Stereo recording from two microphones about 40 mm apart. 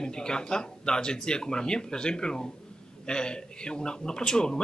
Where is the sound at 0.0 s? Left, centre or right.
Centre.